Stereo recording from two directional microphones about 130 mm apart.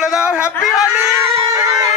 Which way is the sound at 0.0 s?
5° right (ahead or behind).